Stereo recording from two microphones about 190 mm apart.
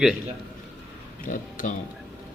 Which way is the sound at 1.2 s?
45° left (ahead or behind).